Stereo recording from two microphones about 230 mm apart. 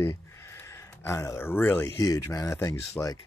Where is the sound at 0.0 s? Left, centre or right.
Centre.